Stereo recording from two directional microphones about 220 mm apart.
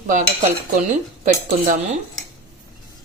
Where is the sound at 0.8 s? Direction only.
35° right (ahead or behind).